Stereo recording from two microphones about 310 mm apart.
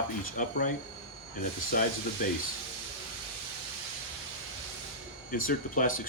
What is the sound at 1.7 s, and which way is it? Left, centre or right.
Speech, left.